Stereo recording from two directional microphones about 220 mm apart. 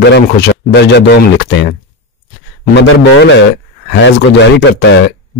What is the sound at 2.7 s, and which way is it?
Speech, 55° left (ahead or behind).